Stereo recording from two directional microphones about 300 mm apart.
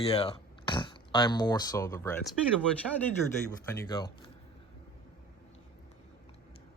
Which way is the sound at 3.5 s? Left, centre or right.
Centre.